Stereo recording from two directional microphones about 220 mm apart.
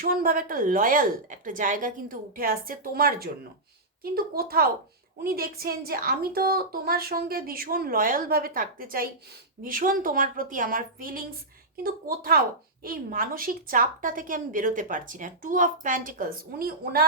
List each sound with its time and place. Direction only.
0.0 s a woman's voice: 40° right (ahead or behind)